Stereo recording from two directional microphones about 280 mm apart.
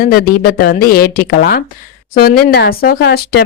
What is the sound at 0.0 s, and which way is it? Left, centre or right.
Speech, left.